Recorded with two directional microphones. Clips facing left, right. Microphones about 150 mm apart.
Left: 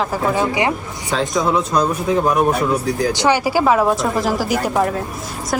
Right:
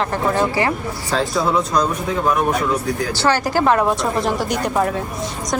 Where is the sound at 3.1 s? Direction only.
15° left (ahead or behind).